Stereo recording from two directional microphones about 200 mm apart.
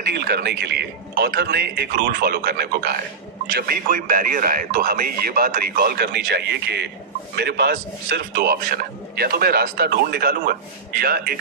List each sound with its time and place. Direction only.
0.1 s speech: 55° right (ahead or behind)